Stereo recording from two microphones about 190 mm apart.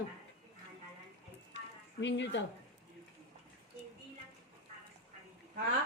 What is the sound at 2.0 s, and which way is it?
Speech, 65° left (ahead or behind).